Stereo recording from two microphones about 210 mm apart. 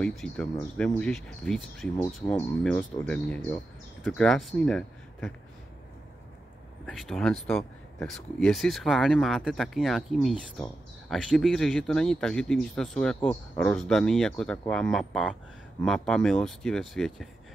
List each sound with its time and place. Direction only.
0.0 s speech: 5° left (ahead or behind)
6.9 s speech: centre (ahead or behind)